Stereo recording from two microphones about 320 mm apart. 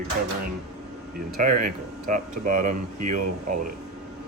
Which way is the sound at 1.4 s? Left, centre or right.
Right.